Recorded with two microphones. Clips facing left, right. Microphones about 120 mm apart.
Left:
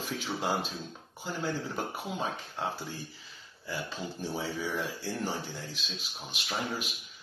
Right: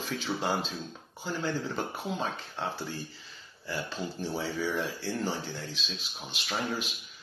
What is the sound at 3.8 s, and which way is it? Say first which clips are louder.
Speech: right 2 dB; 10° left (ahead or behind).